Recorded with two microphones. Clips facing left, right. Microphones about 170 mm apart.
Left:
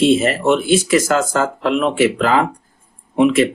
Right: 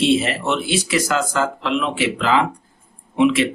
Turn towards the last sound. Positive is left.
turn(degrees=45)  # may be behind; listen again after turning